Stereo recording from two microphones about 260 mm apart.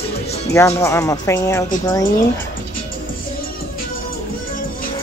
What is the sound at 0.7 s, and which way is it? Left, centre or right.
Speech, centre.